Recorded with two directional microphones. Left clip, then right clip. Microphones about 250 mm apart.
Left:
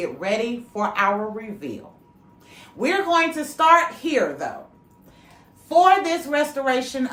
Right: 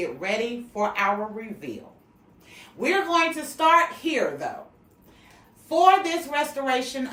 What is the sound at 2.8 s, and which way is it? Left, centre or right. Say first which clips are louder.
Speech: left 2 dB; centre.